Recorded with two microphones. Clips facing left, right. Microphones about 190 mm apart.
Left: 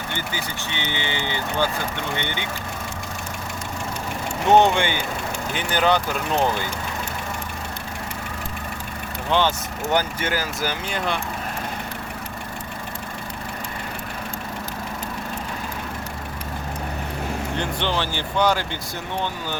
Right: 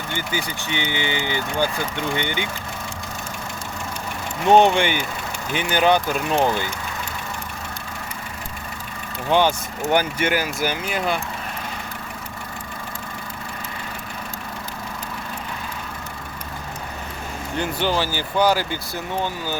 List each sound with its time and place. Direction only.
0.3 s speech: 15° right (ahead or behind)
4.5 s speech: 15° right (ahead or behind)
9.3 s speech: 15° right (ahead or behind)
17.6 s speech: 5° right (ahead or behind)